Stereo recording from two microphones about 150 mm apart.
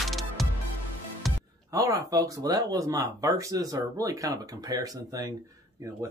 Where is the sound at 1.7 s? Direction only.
20° right (ahead or behind).